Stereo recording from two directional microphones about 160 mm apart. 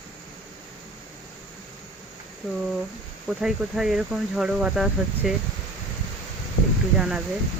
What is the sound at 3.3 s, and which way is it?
Speech, 5° right (ahead or behind).